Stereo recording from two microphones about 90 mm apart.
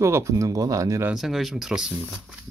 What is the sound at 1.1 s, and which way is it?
Speech, centre (ahead or behind).